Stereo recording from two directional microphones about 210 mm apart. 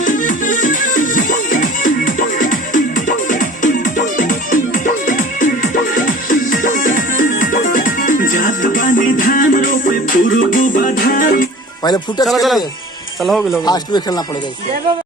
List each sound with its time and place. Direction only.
0.0 s music: 40° left (ahead or behind)
11.8 s speech: 20° left (ahead or behind)
12.2 s speech: centre (ahead or behind)
13.7 s speech: 20° left (ahead or behind)